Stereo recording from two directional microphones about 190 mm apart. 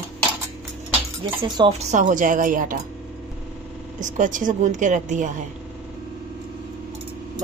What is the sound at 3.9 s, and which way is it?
A woman's voice, 40° right (ahead or behind).